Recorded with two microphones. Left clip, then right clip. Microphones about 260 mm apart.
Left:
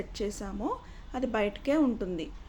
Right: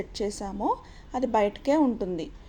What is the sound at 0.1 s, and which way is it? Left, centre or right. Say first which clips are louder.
A woman's voice: right 4 dB; centre.